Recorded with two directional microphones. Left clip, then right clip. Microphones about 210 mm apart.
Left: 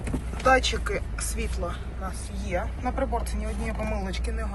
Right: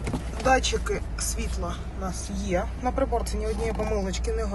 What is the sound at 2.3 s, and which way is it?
Speech, 30° right (ahead or behind).